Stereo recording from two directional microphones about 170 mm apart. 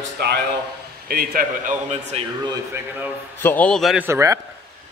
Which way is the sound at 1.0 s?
60° right (ahead or behind).